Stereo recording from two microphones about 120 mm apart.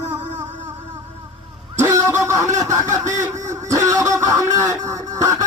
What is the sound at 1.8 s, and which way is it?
Speech, 25° right (ahead or behind).